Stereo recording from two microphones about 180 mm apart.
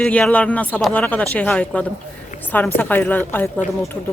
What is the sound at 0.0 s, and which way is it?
Speech, 5° left (ahead or behind).